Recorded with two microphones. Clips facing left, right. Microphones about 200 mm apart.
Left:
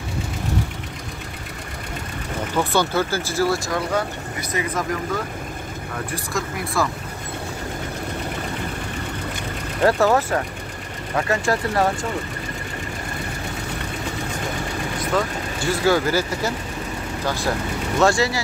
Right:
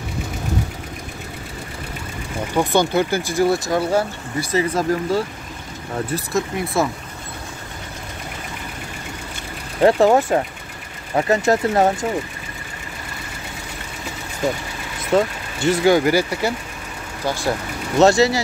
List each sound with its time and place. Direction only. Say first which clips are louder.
2.5 s speech: right 3 dB; 15° right (ahead or behind)
3.7 s speech: right 4 dB; 30° right (ahead or behind)
9.8 s speech: right 4 dB; 20° right (ahead or behind)
15.1 s speech: right 7 dB; 20° right (ahead or behind)
17.9 s speech: right 5 dB; 20° right (ahead or behind)